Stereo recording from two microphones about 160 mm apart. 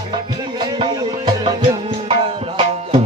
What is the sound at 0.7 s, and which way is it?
Music, 25° right (ahead or behind).